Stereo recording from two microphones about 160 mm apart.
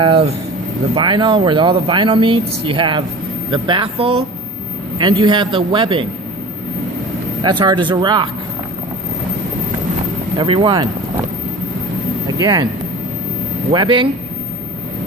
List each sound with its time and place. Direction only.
0.0 s a man's voice: 30° right (ahead or behind)
7.6 s speech: 30° right (ahead or behind)
10.3 s a man's voice: 30° right (ahead or behind)
12.4 s speech: 25° right (ahead or behind)
13.7 s a man's voice: 30° right (ahead or behind)